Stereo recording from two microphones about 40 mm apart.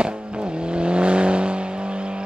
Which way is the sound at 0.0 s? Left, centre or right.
Right.